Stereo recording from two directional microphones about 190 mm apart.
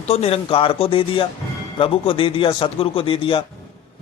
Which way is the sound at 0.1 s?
30° left (ahead or behind).